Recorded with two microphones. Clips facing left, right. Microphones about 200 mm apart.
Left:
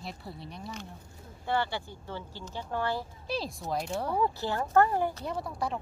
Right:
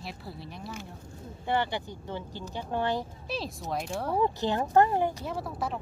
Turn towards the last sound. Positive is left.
turn(degrees=0)  # may be behind; listen again after turning